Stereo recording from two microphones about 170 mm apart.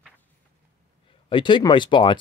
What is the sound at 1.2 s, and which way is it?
Speech, 30° left (ahead or behind).